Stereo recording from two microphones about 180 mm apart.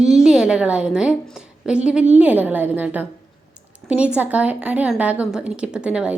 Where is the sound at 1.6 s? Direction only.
5° right (ahead or behind).